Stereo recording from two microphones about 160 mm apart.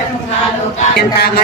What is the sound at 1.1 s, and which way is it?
Speech, 90° left.